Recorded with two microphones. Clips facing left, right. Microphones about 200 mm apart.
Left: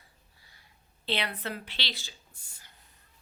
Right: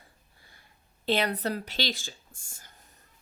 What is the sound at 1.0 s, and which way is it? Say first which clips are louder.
Speech: right 6 dB; 45° right (ahead or behind).